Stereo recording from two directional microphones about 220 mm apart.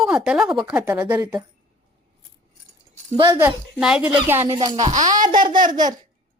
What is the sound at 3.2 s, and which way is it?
Speech, 20° right (ahead or behind).